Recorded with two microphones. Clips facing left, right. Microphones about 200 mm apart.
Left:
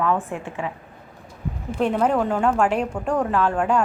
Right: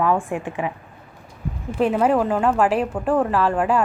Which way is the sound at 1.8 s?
5° right (ahead or behind).